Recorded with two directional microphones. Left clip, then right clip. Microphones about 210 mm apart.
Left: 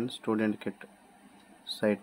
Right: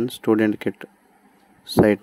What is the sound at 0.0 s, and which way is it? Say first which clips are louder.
Speech: right 11 dB; 35° right (ahead or behind).